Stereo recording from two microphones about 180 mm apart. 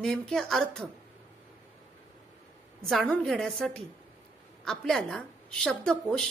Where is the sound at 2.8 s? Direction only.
5° left (ahead or behind).